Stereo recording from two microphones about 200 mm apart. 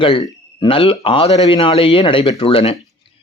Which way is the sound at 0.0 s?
25° left (ahead or behind).